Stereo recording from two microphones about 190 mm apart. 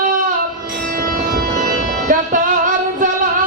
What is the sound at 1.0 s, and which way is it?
Music, 50° right (ahead or behind).